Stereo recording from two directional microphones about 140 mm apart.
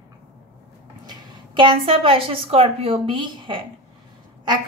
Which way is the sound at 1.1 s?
35° right (ahead or behind).